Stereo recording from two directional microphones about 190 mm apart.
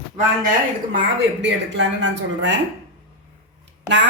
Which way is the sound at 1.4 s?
70° right (ahead or behind).